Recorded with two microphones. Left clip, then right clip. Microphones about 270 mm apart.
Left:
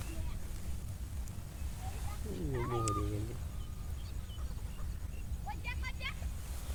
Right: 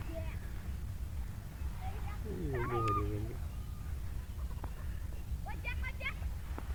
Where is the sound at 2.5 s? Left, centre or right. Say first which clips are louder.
Right 1 dB; centre.